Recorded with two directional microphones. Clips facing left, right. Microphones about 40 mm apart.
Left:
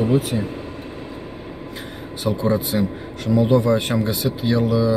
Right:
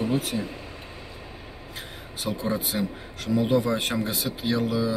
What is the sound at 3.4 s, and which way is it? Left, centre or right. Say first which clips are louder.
Speech: left 6 dB; centre.